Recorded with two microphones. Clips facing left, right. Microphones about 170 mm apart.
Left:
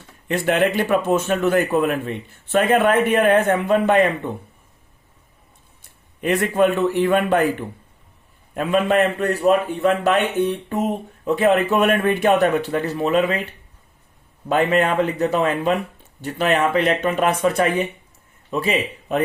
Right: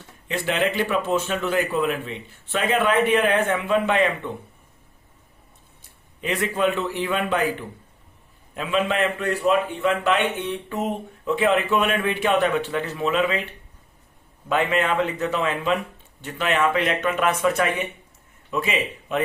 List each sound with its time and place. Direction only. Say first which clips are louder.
0.3 s a man's voice: left 5 dB; 50° left (ahead or behind)
6.2 s a man's voice: left 5 dB; 55° left (ahead or behind)
14.5 s a man's voice: left 4 dB; 35° left (ahead or behind)